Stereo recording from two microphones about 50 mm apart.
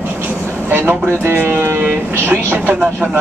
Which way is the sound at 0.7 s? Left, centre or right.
Right.